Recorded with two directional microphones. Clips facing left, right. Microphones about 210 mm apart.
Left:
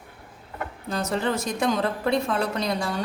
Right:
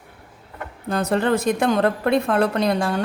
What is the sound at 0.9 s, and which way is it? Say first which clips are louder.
A woman's voice: right 6 dB; 55° right (ahead or behind).